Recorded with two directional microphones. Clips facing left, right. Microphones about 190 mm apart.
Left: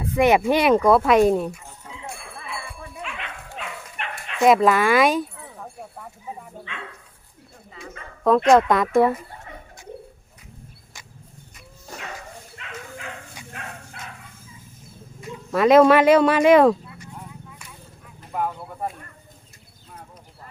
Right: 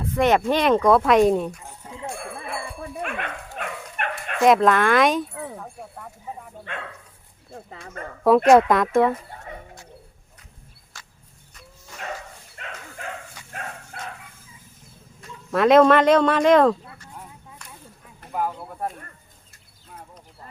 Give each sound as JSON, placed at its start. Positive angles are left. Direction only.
{"t": 0.0, "sound": "speech", "side_deg": 10}
{"t": 2.1, "sound": "a sound", "side_deg": -50}
{"t": 3.0, "sound": "dog", "side_deg": -55}
{"t": 4.4, "sound": "speech", "side_deg": 0}
{"t": 8.0, "sound": "speech", "side_deg": -50}
{"t": 8.4, "sound": "speech", "side_deg": -5}
{"t": 10.9, "sound": "horse", "side_deg": 15}
{"t": 12.6, "sound": "dog", "side_deg": -45}
{"t": 14.0, "sound": "dog", "side_deg": -40}
{"t": 15.2, "sound": "speech", "side_deg": 0}
{"t": 18.3, "sound": "speech", "side_deg": 0}